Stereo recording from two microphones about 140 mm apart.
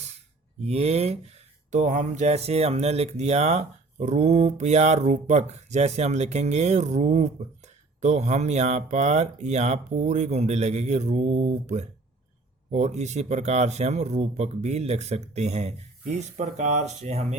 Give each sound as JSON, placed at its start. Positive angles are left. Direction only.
{"t": 0.6, "sound": "speech", "side_deg": -50}
{"t": 1.7, "sound": "speech", "side_deg": -60}